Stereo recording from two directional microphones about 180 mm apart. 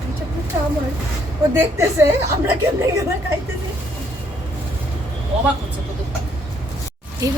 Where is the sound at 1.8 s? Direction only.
15° right (ahead or behind).